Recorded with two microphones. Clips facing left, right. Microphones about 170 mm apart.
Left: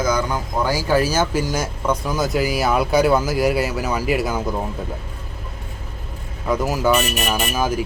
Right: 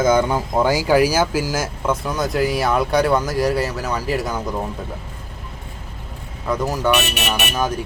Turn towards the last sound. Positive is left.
turn(degrees=5)  # may be behind; listen again after turning